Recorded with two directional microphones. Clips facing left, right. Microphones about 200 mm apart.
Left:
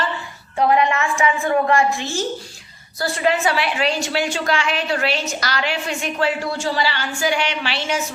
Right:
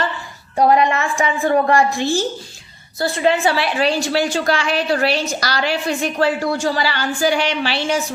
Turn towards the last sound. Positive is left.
turn(degrees=-35)  # may be behind; listen again after turning